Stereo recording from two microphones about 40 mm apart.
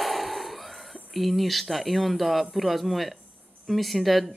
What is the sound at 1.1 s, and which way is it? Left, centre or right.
Speech, centre.